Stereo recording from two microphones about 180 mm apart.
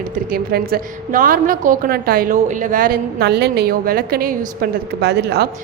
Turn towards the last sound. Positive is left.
turn(degrees=-65)  # may be behind; listen again after turning